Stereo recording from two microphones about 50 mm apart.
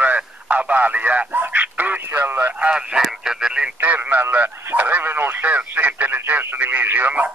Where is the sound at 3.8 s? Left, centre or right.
Right.